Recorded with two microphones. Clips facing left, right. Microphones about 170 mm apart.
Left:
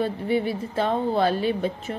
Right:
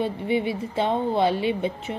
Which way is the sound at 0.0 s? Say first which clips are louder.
Even; 20° right (ahead or behind).